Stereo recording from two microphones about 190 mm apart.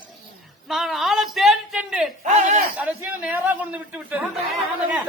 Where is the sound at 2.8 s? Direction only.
10° right (ahead or behind).